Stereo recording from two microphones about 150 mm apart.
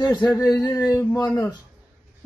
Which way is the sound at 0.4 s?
25° left (ahead or behind).